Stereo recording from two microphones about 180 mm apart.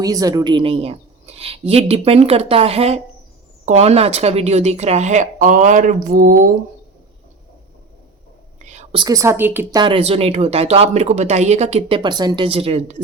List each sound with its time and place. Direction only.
0.0 s speech: 20° right (ahead or behind); by 6.5 s 45° right (ahead or behind)
8.6 s whispering: 40° right (ahead or behind)
9.0 s a woman's voice: 20° right (ahead or behind)
9.8 s speech: 30° right (ahead or behind)